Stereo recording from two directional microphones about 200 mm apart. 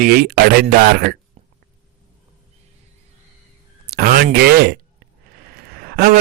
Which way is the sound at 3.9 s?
50° right (ahead or behind).